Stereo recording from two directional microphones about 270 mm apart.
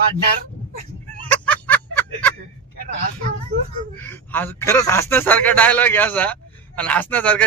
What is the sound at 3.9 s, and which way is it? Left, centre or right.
Speech, centre.